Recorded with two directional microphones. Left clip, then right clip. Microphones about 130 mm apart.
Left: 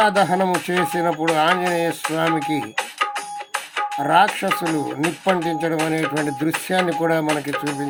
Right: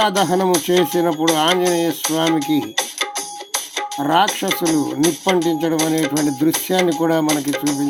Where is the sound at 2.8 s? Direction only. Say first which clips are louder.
Right 1 dB; 40° right (ahead or behind).